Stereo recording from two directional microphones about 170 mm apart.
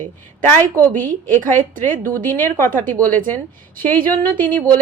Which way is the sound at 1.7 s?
50° right (ahead or behind).